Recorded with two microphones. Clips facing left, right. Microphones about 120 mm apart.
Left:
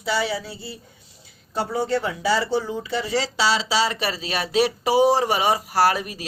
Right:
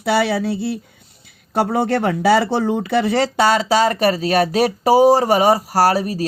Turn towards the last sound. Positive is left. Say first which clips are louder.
# right 5 dB
turn(degrees=-40)  # may be behind; listen again after turning